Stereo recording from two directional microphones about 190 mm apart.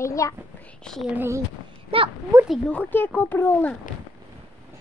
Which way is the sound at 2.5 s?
5° left (ahead or behind).